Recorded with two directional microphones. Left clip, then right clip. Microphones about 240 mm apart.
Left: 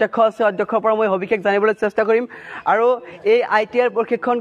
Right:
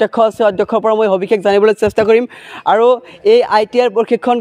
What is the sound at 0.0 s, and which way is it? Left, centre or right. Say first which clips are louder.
Speech: right 4 dB; right.